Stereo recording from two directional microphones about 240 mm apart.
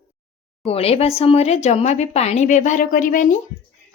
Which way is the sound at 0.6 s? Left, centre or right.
Left.